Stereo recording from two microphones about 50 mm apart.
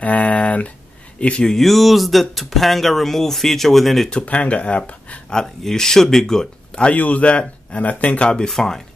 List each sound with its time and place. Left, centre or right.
0.0 s speech: left
1.4 s speech: centre
4.3 s speech: left
5.3 s speech: centre
6.7 s a sound: left
7.0 s speech: left
8.5 s speech: centre